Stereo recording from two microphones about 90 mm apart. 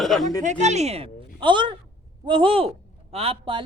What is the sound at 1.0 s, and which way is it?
Speech, 65° right (ahead or behind).